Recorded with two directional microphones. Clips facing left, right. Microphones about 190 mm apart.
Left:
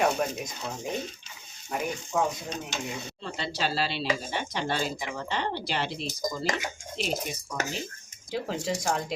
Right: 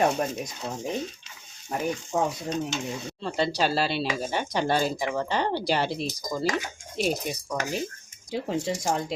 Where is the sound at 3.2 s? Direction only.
45° right (ahead or behind).